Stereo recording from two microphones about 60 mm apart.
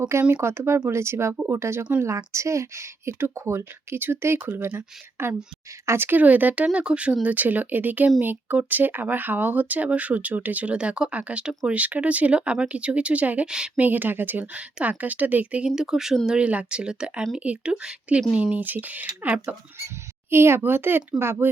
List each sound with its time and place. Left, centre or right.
0.1 s a woman's voice: right
15.6 s speech: centre
16.2 s speech: centre
20.3 s speech: right